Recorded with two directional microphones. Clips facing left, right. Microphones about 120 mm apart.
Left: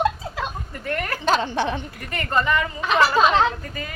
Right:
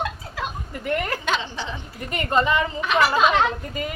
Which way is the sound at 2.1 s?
20° right (ahead or behind).